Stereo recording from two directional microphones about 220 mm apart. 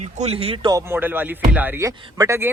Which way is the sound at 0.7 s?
10° right (ahead or behind).